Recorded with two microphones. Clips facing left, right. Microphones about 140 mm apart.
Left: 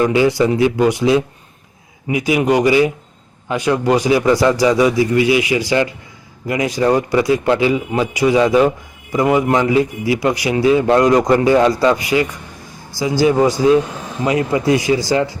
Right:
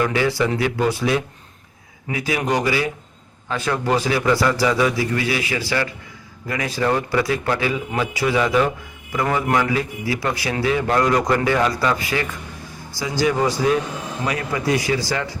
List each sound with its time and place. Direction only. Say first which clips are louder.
0.0 s a man's voice: left 6 dB; 20° left (ahead or behind)